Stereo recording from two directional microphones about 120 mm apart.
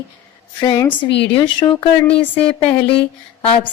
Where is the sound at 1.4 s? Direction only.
40° left (ahead or behind).